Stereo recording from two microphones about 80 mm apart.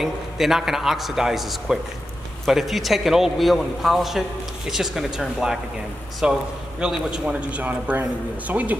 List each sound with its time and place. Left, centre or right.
0.0 s a man's voice: centre
7.2 s speech: centre